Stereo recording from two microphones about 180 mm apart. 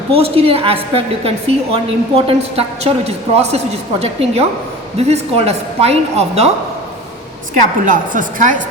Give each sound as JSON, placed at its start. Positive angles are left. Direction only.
{"t": 0.1, "sound": "a woman's voice", "side_deg": -30}
{"t": 7.9, "sound": "a woman's voice", "side_deg": -45}